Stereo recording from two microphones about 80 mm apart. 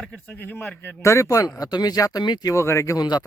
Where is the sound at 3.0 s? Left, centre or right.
Left.